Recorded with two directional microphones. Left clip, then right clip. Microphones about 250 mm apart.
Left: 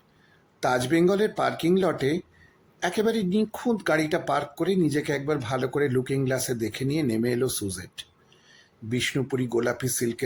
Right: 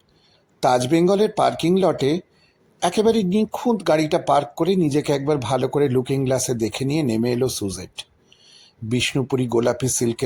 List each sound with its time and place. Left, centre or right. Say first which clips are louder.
0.6 s speech: right 5 dB; centre